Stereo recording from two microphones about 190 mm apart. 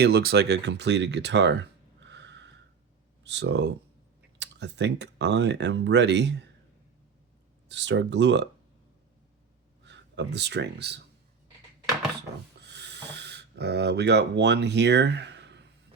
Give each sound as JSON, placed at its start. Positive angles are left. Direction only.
{"t": 0.0, "sound": "speech", "side_deg": -55}
{"t": 7.7, "sound": "speech", "side_deg": -70}
{"t": 9.8, "sound": "speech", "side_deg": -65}
{"t": 12.6, "sound": "a sound", "side_deg": -60}